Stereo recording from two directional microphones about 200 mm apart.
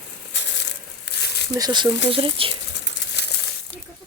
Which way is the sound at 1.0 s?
55° left (ahead or behind).